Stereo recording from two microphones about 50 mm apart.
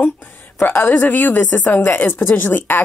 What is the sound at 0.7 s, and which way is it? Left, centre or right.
Speech, left.